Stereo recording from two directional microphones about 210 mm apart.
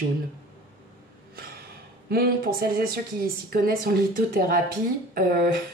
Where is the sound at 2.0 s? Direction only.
45° right (ahead or behind).